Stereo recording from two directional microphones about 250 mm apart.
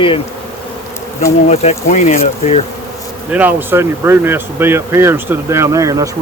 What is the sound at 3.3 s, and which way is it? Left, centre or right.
Speech, centre.